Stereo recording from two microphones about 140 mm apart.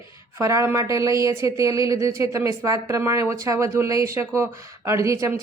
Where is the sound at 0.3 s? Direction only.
20° right (ahead or behind).